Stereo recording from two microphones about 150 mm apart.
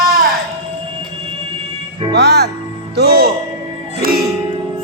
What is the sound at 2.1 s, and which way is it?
Music, 90° right.